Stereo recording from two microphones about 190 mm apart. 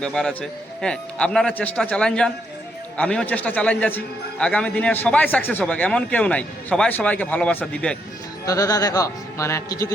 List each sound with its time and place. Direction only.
0.0 s a man's voice: 5° left (ahead or behind)
8.4 s speech: 20° left (ahead or behind)